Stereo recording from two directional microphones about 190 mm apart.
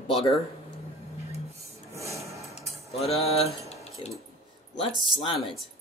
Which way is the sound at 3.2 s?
35° left (ahead or behind).